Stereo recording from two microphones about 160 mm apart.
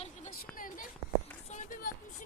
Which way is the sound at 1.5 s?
50° left (ahead or behind).